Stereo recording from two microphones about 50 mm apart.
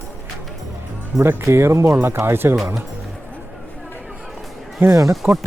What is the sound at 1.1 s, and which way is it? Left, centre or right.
Speech, centre.